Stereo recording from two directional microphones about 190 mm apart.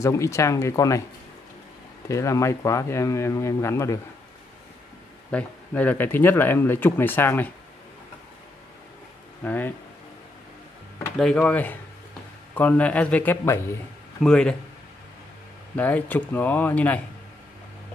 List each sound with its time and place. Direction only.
0.0 s speech: 15° left (ahead or behind)
2.0 s speech: 15° left (ahead or behind)
5.3 s speech: 10° left (ahead or behind)
9.4 s speech: 10° left (ahead or behind)
11.1 s speech: 5° left (ahead or behind)
15.7 s speech: 10° left (ahead or behind)